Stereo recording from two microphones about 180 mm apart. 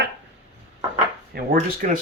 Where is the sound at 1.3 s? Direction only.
50° right (ahead or behind).